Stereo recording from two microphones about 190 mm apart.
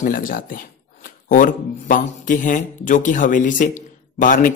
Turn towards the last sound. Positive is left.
turn(degrees=45)  # may be behind; listen again after turning